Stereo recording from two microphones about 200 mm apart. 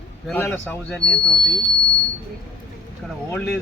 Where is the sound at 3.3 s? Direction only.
Centre (ahead or behind).